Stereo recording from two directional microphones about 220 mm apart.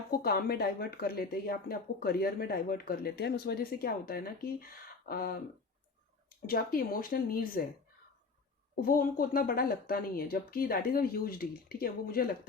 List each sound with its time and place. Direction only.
0.1 s speech: 45° left (ahead or behind)
6.4 s speech: 40° left (ahead or behind)
8.7 s speech: 40° left (ahead or behind)